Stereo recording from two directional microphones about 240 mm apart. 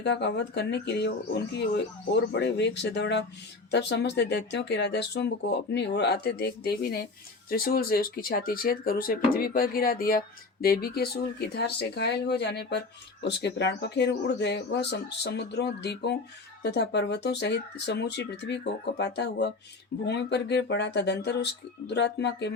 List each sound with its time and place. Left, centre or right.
0.0 s speech: left